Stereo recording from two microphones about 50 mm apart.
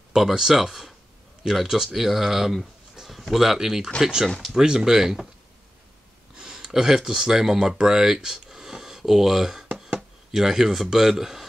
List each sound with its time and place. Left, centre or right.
0.1 s speech: centre
4.4 s speech: centre
6.3 s speech: centre